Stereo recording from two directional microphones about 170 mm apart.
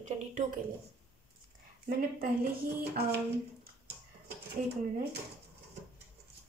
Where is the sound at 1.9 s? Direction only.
60° right (ahead or behind).